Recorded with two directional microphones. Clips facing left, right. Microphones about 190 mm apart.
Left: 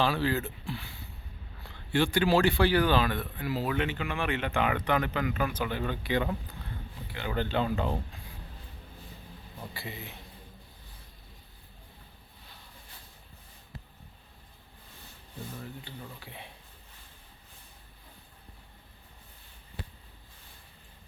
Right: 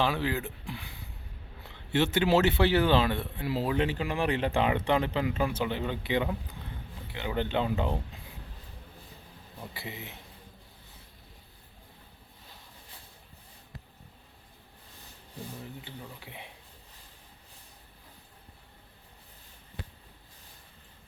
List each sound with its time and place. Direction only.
0.0 s a man's voice: 15° right (ahead or behind)
9.7 s a man's voice: 20° right (ahead or behind)
15.8 s speech: 20° right (ahead or behind)